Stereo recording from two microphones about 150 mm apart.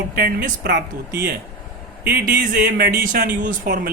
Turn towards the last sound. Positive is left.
turn(degrees=-85)